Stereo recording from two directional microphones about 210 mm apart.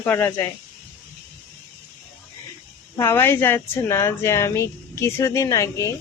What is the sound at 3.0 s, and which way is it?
Speech, 10° left (ahead or behind).